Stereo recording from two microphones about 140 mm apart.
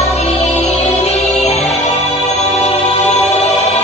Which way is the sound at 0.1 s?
55° left (ahead or behind).